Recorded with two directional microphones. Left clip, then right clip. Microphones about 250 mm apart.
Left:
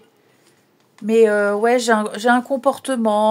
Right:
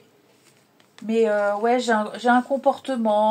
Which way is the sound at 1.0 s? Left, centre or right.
Left.